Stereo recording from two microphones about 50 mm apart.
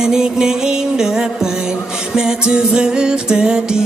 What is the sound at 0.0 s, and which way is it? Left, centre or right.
Music, centre.